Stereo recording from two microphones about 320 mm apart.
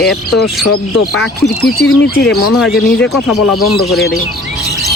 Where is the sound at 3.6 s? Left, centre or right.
Left.